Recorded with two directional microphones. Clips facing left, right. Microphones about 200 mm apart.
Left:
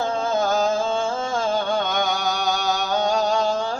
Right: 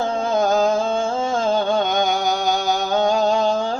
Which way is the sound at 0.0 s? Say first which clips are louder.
Right 3 dB; 20° right (ahead or behind).